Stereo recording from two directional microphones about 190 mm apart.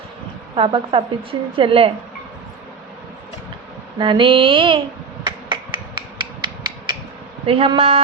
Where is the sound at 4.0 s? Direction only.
25° right (ahead or behind).